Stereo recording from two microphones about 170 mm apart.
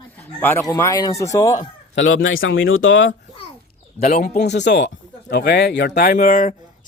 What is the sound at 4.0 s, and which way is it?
Speech, 45° left (ahead or behind).